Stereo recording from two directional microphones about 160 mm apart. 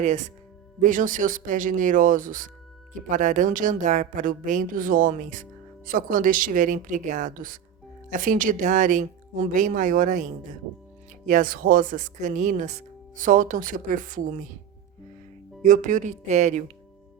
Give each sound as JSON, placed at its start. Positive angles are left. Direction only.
{"t": 0.8, "sound": "a woman's voice", "side_deg": -55}
{"t": 11.3, "sound": "a woman's voice", "side_deg": -60}
{"t": 15.6, "sound": "speech", "side_deg": -50}